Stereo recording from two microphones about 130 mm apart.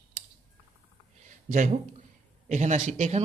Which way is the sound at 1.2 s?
75° right (ahead or behind).